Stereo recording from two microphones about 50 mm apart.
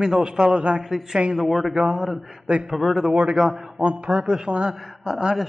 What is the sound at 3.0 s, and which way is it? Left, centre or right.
A man's voice, centre.